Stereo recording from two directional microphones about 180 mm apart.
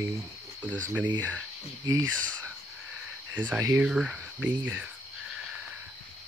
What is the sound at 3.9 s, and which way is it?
Speech, 5° right (ahead or behind).